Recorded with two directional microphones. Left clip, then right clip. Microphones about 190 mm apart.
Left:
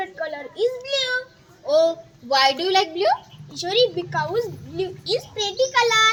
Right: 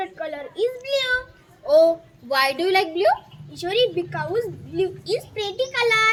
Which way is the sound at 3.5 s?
20° right (ahead or behind).